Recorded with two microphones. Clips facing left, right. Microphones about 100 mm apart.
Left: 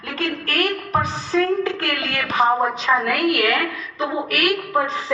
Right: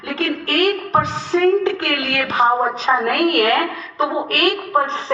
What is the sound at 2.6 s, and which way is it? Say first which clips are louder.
A woman's voice: right 2 dB; 35° right (ahead or behind).